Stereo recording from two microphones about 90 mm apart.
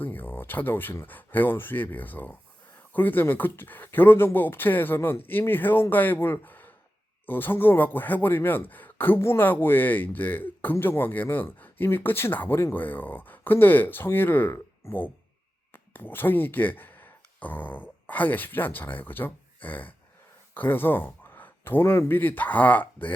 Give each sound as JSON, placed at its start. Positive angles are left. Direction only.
{"t": 0.0, "sound": "speech", "side_deg": 20}